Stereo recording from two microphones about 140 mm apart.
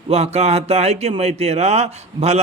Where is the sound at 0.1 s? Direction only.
50° right (ahead or behind).